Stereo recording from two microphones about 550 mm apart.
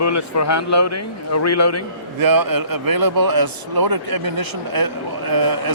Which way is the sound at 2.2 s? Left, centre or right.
Right.